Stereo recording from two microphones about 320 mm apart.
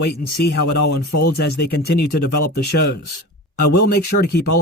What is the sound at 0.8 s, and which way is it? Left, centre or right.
Speech, left.